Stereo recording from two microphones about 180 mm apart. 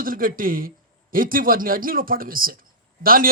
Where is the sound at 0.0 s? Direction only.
50° right (ahead or behind).